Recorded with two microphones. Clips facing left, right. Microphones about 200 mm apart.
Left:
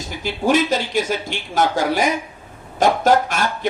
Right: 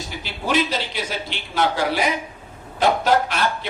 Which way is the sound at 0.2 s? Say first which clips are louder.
Left 5 dB; 45° left (ahead or behind).